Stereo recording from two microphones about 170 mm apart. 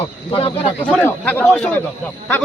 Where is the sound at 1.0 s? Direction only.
10° left (ahead or behind).